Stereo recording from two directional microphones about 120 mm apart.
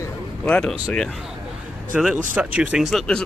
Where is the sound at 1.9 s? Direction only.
5° right (ahead or behind).